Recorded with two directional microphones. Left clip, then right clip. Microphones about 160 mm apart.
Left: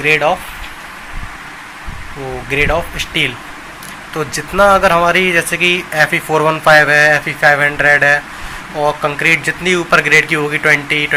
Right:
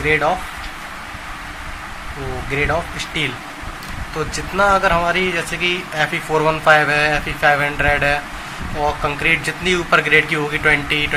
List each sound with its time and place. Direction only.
0.0 s speech: 20° left (ahead or behind)
2.5 s speech: 25° left (ahead or behind)